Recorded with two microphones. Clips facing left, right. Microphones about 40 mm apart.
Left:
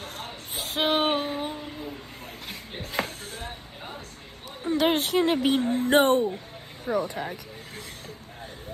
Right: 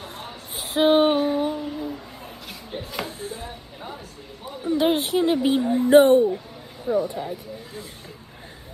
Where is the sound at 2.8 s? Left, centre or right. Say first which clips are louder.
Left 1 dB; left.